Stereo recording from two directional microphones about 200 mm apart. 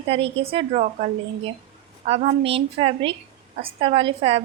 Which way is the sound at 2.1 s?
30° right (ahead or behind).